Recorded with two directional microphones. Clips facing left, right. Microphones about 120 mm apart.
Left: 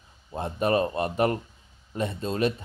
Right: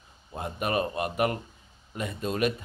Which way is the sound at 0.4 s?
30° left (ahead or behind).